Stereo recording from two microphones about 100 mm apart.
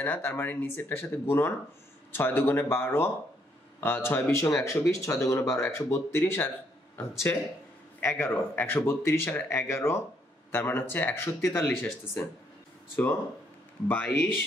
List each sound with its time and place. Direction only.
0.0 s speech: 20° left (ahead or behind)
8.0 s speech: 15° left (ahead or behind)
12.9 s speech: 20° left (ahead or behind)